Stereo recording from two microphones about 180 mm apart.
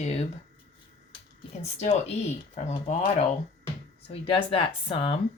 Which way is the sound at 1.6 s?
35° left (ahead or behind).